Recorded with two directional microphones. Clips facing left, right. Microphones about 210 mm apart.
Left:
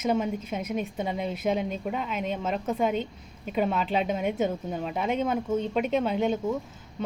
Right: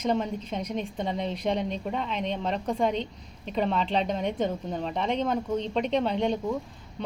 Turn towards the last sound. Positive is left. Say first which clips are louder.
# left 1 dB
turn(degrees=5)  # may be behind; listen again after turning